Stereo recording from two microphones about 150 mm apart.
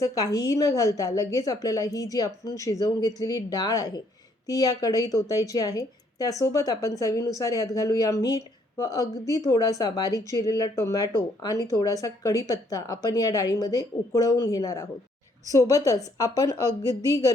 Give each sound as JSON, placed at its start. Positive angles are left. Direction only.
{"t": 0.0, "sound": "speech", "side_deg": 25}